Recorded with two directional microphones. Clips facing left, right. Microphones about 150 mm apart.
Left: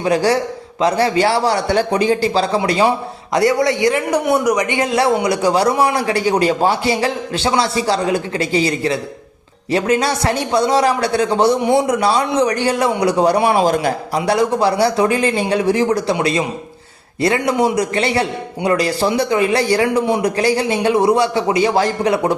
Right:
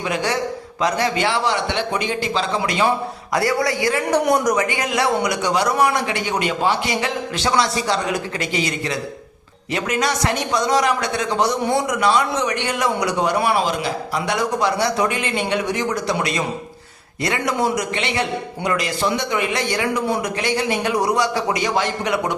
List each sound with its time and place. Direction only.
0.0 s a man's voice: 35° left (ahead or behind)
3.3 s a man's voice: 20° left (ahead or behind)
4.1 s a man's voice: 5° left (ahead or behind)
4.5 s a man's voice: 20° left (ahead or behind); by 13.9 s 45° left (ahead or behind)
14.2 s a man's voice: 30° left (ahead or behind)
17.2 s a man's voice: 30° left (ahead or behind)